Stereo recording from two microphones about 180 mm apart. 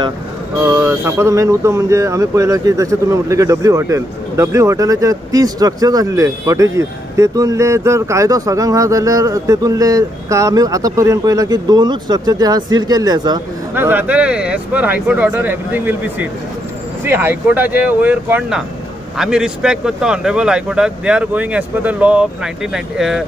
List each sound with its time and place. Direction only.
0.6 s speech: 15° right (ahead or behind)
13.7 s speech: 10° right (ahead or behind)